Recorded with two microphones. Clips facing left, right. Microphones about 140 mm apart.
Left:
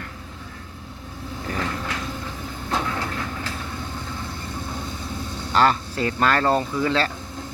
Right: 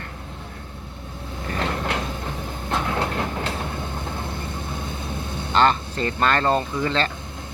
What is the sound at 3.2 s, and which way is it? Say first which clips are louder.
Train: right 4 dB; 60° right (ahead or behind).